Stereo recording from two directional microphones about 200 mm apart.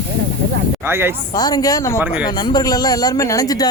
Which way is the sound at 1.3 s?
20° left (ahead or behind).